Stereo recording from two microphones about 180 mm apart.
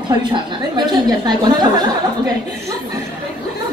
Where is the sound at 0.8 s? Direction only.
20° right (ahead or behind).